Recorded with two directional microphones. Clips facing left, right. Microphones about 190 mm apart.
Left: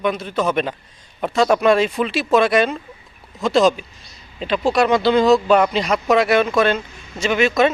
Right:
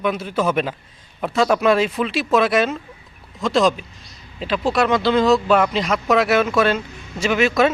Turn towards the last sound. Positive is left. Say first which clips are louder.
# left 1 dB
turn(degrees=-5)  # may be behind; listen again after turning